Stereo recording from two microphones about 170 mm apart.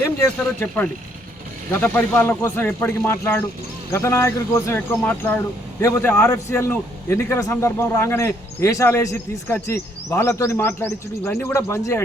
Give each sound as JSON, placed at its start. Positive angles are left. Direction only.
{"t": 1.7, "sound": "a man's voice", "side_deg": 10}